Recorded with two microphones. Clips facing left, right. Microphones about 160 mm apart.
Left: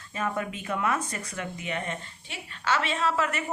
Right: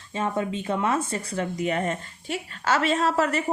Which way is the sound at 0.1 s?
25° right (ahead or behind).